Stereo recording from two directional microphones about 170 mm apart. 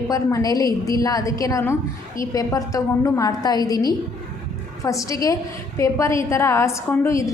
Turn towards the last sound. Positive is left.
turn(degrees=15)  # may be behind; listen again after turning